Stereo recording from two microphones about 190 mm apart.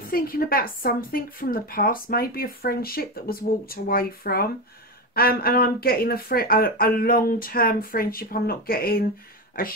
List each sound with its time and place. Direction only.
0.1 s a woman's voice: 50° left (ahead or behind)